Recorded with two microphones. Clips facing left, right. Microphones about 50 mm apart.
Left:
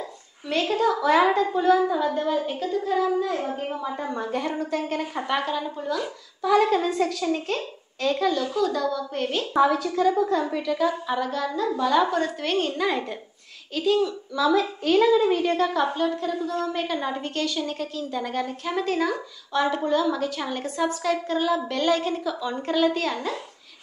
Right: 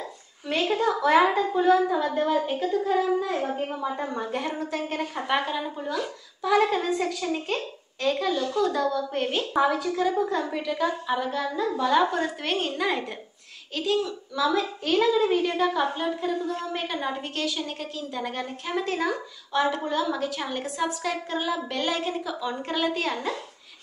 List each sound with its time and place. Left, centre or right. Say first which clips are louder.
0.5 s a child's voice: left 2 dB; centre